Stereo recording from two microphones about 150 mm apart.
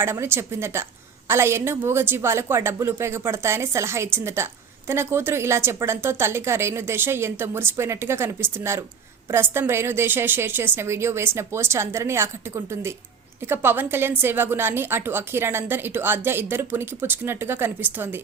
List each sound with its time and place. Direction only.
0.0 s a woman's voice: 15° right (ahead or behind)